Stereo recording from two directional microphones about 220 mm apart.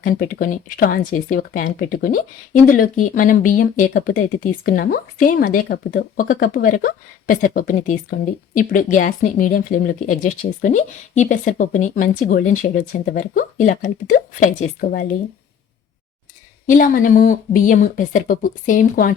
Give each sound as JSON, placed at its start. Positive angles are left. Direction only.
{"t": 0.0, "sound": "speech", "side_deg": 40}
{"t": 16.6, "sound": "speech", "side_deg": 40}